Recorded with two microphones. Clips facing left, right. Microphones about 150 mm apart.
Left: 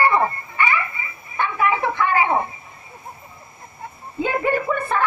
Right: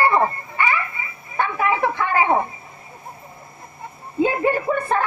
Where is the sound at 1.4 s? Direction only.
35° right (ahead or behind).